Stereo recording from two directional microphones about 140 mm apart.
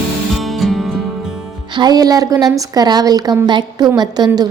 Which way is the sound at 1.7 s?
30° right (ahead or behind).